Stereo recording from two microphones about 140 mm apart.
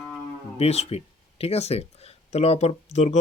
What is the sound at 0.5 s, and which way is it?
Speech, 50° left (ahead or behind).